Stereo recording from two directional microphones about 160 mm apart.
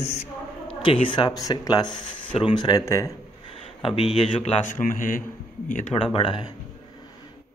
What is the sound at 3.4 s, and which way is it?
A man's voice, 35° left (ahead or behind).